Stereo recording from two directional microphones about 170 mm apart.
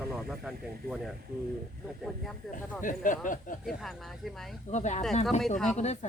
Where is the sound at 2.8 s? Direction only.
50° left (ahead or behind).